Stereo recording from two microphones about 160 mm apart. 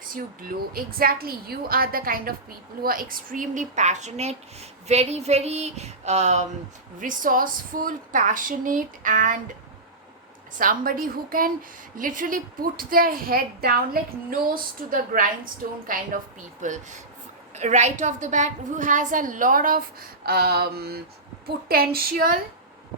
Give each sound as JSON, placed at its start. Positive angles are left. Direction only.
{"t": 0.1, "sound": "a woman's voice", "side_deg": -65}
{"t": 7.0, "sound": "a woman's voice", "side_deg": -55}
{"t": 10.6, "sound": "a woman's voice", "side_deg": -60}